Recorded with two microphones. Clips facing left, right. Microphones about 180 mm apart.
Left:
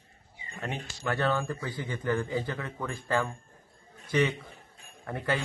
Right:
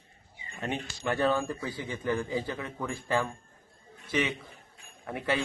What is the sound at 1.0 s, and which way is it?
A man's voice, 15° right (ahead or behind).